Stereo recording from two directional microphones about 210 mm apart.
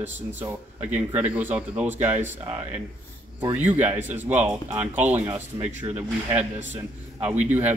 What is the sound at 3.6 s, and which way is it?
A man's voice, 10° right (ahead or behind).